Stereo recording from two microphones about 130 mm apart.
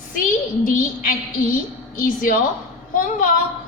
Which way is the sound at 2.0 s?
90° left.